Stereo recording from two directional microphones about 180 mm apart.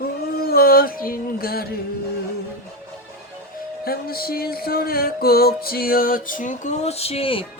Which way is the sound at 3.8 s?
55° left (ahead or behind).